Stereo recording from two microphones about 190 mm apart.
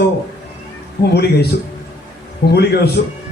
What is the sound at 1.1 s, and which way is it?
Speech, 60° left (ahead or behind).